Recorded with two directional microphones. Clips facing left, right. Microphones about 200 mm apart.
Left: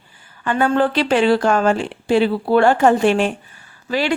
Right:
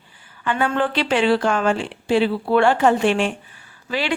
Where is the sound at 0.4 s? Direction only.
40° left (ahead or behind).